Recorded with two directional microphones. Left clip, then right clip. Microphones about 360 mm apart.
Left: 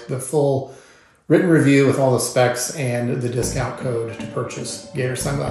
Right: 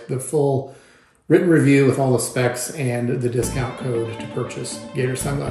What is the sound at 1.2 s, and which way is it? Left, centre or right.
Speech, centre.